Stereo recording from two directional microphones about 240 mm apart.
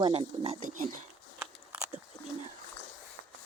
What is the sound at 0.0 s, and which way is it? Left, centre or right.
Speech, right.